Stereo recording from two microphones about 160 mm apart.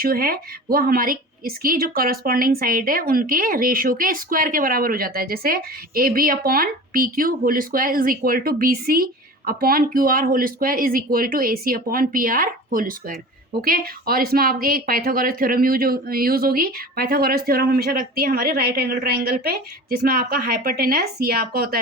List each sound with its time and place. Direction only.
0.0 s a woman's voice: 65° right (ahead or behind)